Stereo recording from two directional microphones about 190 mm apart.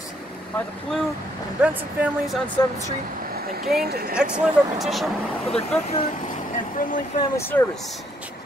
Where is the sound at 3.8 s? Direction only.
55° right (ahead or behind).